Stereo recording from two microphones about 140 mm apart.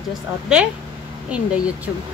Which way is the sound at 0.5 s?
5° right (ahead or behind).